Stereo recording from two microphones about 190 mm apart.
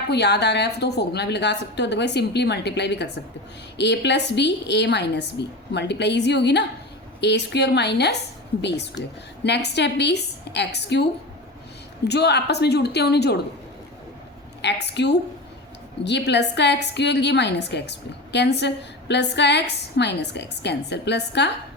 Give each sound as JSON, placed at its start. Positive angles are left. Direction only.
{"t": 0.1, "sound": "a woman's voice", "side_deg": 60}
{"t": 14.6, "sound": "a woman's voice", "side_deg": 65}